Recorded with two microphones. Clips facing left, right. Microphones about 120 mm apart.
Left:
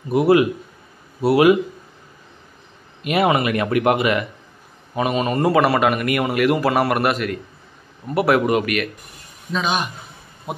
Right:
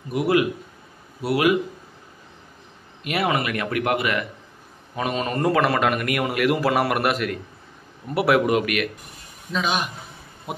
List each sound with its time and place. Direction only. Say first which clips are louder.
0.1 s speech: left 5 dB; 30° left (ahead or behind)
3.0 s speech: left 5 dB; 20° left (ahead or behind)
4.9 s a man's voice: left 5 dB; 10° left (ahead or behind)